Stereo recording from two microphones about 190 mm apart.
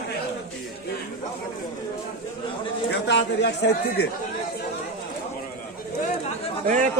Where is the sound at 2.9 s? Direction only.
65° left (ahead or behind).